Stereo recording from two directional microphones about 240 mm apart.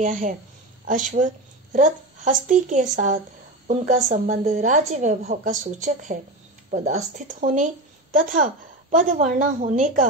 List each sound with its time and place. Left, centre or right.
0.0 s a woman's voice: right